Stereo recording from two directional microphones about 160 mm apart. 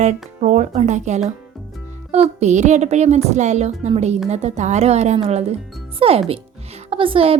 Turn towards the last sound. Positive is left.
turn(degrees=-35)  # may be behind; listen again after turning